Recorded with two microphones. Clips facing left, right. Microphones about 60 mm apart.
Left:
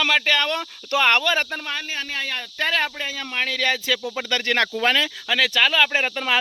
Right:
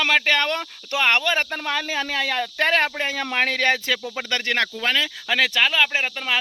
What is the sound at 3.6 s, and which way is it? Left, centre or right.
Speech, right.